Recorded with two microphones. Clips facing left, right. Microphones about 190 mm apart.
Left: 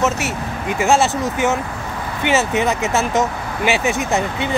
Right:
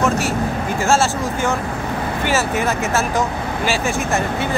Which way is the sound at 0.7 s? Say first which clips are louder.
Left 2 dB; 20° left (ahead or behind).